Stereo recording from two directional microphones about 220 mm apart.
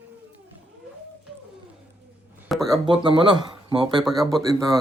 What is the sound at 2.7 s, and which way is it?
Speech, 20° right (ahead or behind).